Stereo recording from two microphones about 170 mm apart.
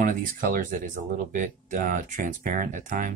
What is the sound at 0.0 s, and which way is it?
Speech, 55° right (ahead or behind).